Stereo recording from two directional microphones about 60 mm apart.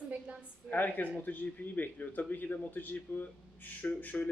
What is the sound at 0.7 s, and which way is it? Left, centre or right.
A man's voice, left.